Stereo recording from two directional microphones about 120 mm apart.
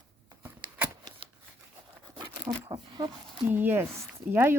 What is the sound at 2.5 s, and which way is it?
Speech, 40° right (ahead or behind).